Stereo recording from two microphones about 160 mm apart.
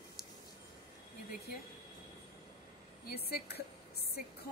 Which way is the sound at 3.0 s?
75° left (ahead or behind).